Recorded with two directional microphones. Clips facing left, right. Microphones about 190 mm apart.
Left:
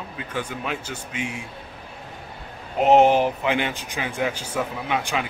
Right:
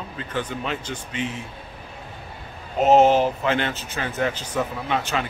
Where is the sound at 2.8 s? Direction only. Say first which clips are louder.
Even; 15° left (ahead or behind).